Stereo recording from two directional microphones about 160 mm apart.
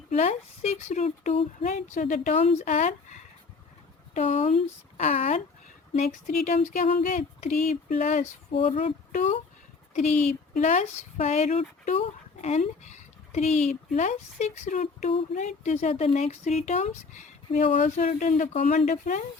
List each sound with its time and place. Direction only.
0.1 s speech: 45° left (ahead or behind)
4.4 s speech: 40° left (ahead or behind)
9.9 s speech: 45° left (ahead or behind)